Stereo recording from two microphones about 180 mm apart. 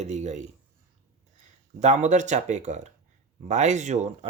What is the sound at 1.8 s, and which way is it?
Speech, 40° right (ahead or behind).